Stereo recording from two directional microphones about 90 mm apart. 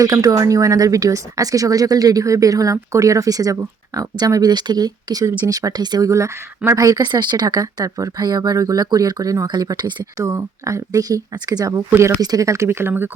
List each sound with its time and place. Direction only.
0.0 s speech: 40° right (ahead or behind)
6.1 s speech: 35° right (ahead or behind)
9.5 s speech: 55° right (ahead or behind)
10.2 s speech: 35° right (ahead or behind)
11.9 s speech: 30° right (ahead or behind)
12.2 s speech: 45° right (ahead or behind); by 13.1 s 25° right (ahead or behind)